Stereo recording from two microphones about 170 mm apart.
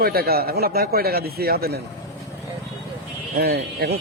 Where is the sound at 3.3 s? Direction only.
70° right (ahead or behind).